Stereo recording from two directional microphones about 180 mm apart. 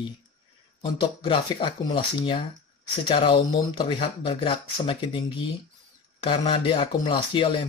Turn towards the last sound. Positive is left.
turn(degrees=30)  # may be behind; listen again after turning